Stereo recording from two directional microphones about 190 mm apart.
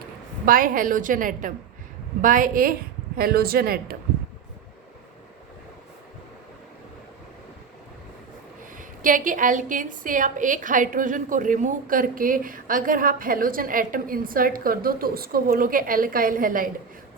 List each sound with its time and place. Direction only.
0.4 s a woman's voice: 45° right (ahead or behind)
8.8 s a woman's voice: 45° right (ahead or behind)